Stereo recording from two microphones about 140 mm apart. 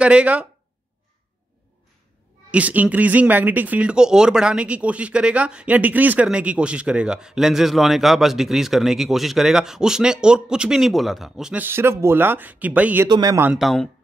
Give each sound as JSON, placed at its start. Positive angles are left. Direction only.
{"t": 0.0, "sound": "speech", "side_deg": -10}
{"t": 2.5, "sound": "speech", "side_deg": -10}
{"t": 13.1, "sound": "a man's voice", "side_deg": -25}
{"t": 13.6, "sound": "a man's voice", "side_deg": 0}